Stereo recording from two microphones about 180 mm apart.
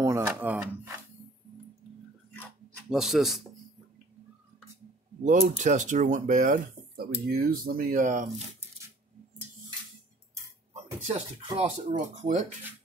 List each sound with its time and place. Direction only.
0.0 s a sound: 15° right (ahead or behind)
0.3 s speech: 10° right (ahead or behind)
2.9 s speech: centre (ahead or behind)
5.2 s speech: 45° right (ahead or behind)
10.7 s a sound: 35° right (ahead or behind)
11.9 s speech: 45° right (ahead or behind)